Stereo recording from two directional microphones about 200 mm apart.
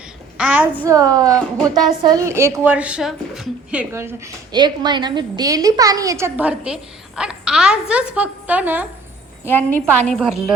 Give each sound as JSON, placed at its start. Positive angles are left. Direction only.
{"t": 0.3, "sound": "a woman's voice", "side_deg": -5}
{"t": 9.4, "sound": "a woman's voice", "side_deg": 10}
{"t": 10.1, "sound": "a woman's voice", "side_deg": 0}